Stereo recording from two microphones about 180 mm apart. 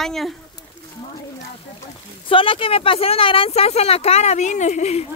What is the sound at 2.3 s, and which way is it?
Speech, 30° left (ahead or behind).